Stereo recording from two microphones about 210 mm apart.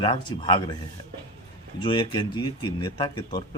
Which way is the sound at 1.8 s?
20° left (ahead or behind).